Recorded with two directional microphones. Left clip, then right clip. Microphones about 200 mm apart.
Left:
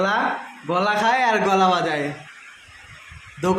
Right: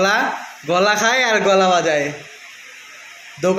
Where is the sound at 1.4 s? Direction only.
20° left (ahead or behind).